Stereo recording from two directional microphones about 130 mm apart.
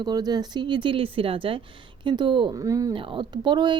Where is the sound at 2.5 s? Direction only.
25° right (ahead or behind).